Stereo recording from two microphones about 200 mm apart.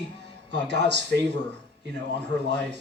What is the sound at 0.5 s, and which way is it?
Speech, 60° right (ahead or behind).